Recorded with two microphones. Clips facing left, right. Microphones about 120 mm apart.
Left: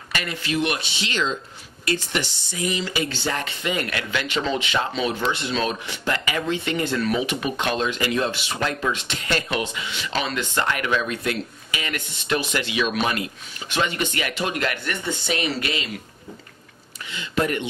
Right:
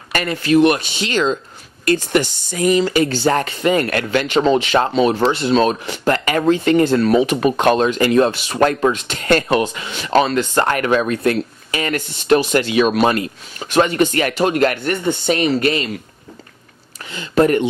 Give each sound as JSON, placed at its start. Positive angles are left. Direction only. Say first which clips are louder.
{"t": 0.1, "sound": "speech", "louder": "right 11 dB", "side_deg": -50}
{"t": 5.1, "sound": "speech", "louder": "right 9 dB", "side_deg": -35}
{"t": 17.0, "sound": "speech", "louder": "right 9 dB", "side_deg": -45}